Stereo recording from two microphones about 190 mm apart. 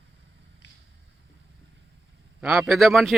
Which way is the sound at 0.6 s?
70° left (ahead or behind).